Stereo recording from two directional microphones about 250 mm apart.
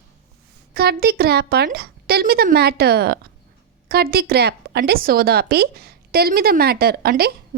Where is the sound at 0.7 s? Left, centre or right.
Right.